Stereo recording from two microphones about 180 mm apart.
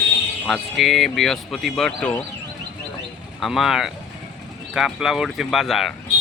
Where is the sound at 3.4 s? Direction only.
Centre (ahead or behind).